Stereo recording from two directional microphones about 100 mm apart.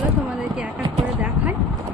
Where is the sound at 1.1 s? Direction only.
15° right (ahead or behind).